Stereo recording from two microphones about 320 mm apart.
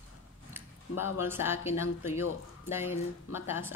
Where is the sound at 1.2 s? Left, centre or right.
Centre.